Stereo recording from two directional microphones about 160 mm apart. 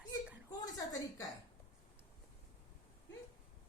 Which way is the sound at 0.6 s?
25° left (ahead or behind).